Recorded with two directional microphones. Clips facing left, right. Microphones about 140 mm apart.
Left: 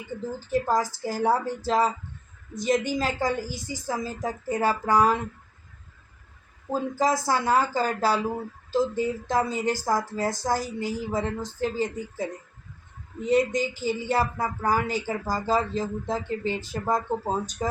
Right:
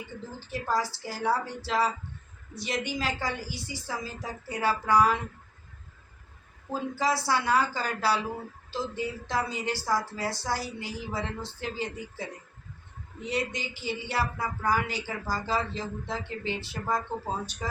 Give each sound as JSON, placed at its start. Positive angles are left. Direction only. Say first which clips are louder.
{"t": 0.3, "sound": "speech", "louder": "left 5 dB", "side_deg": 45}
{"t": 6.9, "sound": "speech", "louder": "left 3 dB", "side_deg": 45}